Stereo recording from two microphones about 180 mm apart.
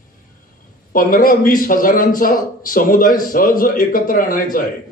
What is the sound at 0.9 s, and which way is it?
A man's voice, 50° left (ahead or behind).